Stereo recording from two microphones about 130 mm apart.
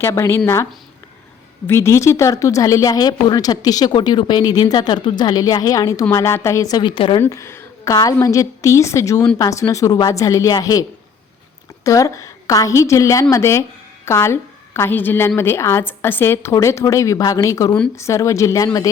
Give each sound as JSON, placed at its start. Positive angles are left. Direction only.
{"t": 0.0, "sound": "speech", "side_deg": 20}
{"t": 7.2, "sound": "a sound", "side_deg": 20}
{"t": 7.9, "sound": "a woman's voice", "side_deg": 25}